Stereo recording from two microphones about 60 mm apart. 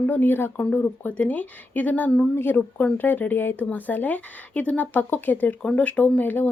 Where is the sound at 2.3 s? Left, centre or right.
Left.